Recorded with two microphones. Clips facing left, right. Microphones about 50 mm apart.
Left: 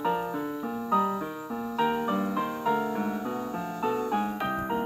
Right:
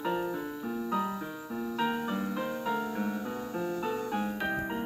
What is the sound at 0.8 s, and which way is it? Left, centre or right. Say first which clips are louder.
Music: left 8 dB; centre.